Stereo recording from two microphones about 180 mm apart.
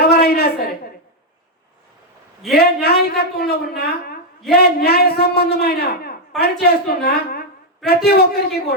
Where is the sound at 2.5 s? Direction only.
60° left (ahead or behind).